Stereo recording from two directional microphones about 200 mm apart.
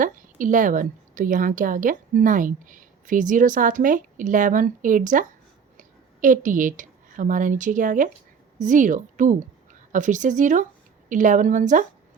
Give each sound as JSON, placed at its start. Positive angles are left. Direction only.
{"t": 0.0, "sound": "a woman's voice", "side_deg": -40}